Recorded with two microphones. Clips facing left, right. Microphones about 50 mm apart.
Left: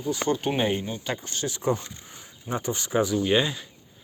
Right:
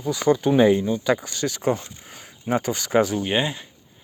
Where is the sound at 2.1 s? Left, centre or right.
Right.